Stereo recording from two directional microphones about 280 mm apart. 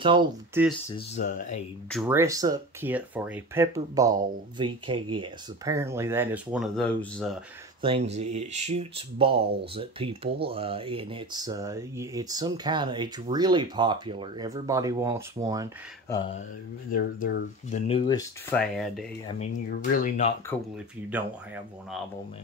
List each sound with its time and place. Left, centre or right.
0.0 s speech: centre
1.1 s speech: left
1.9 s speech: centre
7.8 s speech: right
16.9 s speech: left
17.7 s speech: left
18.5 s speech: centre
19.2 s speech: left
21.1 s speech: centre